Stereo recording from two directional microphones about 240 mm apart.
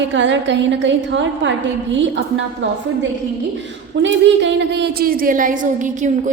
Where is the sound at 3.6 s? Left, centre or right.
Right.